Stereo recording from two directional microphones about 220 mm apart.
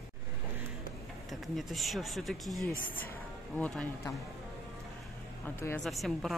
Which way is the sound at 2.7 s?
40° left (ahead or behind).